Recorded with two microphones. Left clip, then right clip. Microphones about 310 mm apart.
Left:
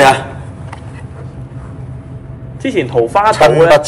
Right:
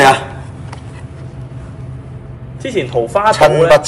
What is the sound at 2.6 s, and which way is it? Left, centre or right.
Speech, left.